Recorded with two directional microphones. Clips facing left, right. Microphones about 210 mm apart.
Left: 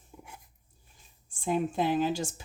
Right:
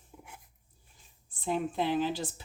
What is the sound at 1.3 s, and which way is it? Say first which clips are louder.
Speech: left 3 dB; 45° left (ahead or behind).